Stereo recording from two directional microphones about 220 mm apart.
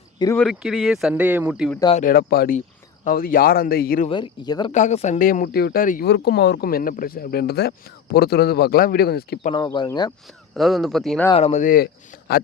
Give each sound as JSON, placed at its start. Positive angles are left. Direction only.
{"t": 0.2, "sound": "speech", "side_deg": 15}
{"t": 0.4, "sound": "speech", "side_deg": 0}
{"t": 2.0, "sound": "speech", "side_deg": 40}
{"t": 4.1, "sound": "speech", "side_deg": 20}
{"t": 4.7, "sound": "speech", "side_deg": 30}
{"t": 9.5, "sound": "speech", "side_deg": 20}
{"t": 10.5, "sound": "speech", "side_deg": 0}
{"t": 11.3, "sound": "speech", "side_deg": 30}